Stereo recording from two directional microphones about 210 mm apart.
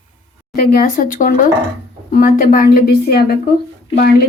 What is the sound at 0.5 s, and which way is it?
Speech, 45° left (ahead or behind).